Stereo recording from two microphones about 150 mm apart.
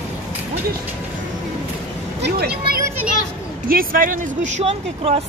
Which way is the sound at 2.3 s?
90° right.